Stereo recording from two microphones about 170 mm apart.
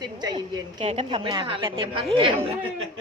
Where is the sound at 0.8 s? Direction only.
40° right (ahead or behind).